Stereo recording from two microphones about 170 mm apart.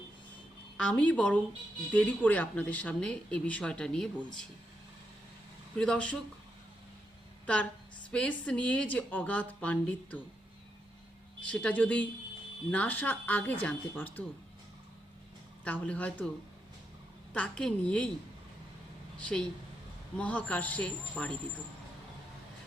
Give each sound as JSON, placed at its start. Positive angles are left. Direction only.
{"t": 0.8, "sound": "speech", "side_deg": 5}
{"t": 5.7, "sound": "speech", "side_deg": 5}
{"t": 7.4, "sound": "a woman's voice", "side_deg": 5}
{"t": 11.4, "sound": "speech", "side_deg": 5}
{"t": 15.6, "sound": "speech", "side_deg": 10}
{"t": 17.3, "sound": "speech", "side_deg": 5}
{"t": 19.2, "sound": "speech", "side_deg": 5}